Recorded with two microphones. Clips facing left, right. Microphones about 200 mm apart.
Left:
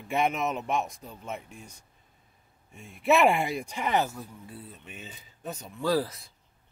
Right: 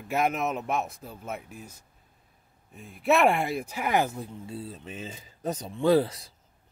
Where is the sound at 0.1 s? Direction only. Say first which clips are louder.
Right 1 dB; centre (ahead or behind); by 4.8 s 30° right (ahead or behind).